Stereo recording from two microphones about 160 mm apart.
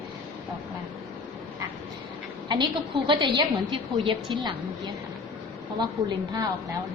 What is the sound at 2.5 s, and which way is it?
A woman's voice, 30° right (ahead or behind).